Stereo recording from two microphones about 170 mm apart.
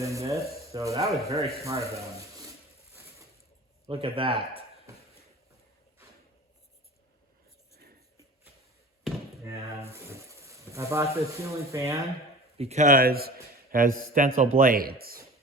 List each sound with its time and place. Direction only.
0.0 s speech: 20° right (ahead or behind)
3.8 s speech: 30° right (ahead or behind)
9.9 s speech: 15° right (ahead or behind)
12.5 s a man's voice: 40° right (ahead or behind); by 15.2 s 60° right (ahead or behind)